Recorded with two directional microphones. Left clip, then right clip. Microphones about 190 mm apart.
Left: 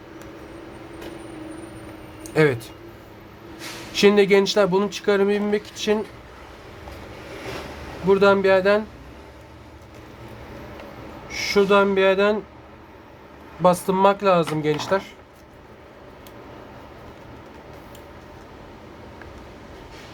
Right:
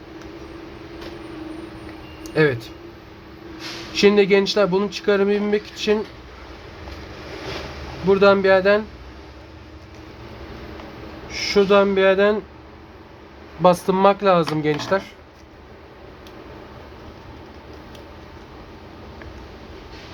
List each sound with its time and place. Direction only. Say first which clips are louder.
2.2 s speech: even; 15° left (ahead or behind)
3.9 s speech: right 1 dB; 10° left (ahead or behind)
8.0 s speech: right 2 dB; 5° left (ahead or behind)
11.3 s speech: right 1 dB; 5° left (ahead or behind)
13.8 s speech: right 2 dB; centre (ahead or behind)